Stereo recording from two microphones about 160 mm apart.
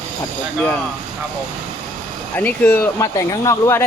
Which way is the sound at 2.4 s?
10° left (ahead or behind).